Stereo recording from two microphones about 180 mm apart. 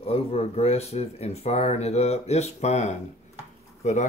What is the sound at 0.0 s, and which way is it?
Speech, 35° left (ahead or behind).